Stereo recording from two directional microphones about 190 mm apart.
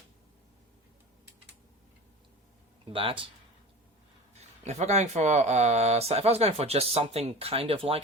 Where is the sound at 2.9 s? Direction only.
30° right (ahead or behind).